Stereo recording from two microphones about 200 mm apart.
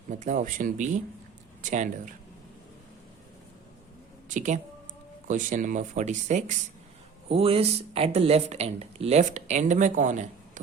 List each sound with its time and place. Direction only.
0.1 s speech: 40° right (ahead or behind)
4.3 s speech: 40° right (ahead or behind)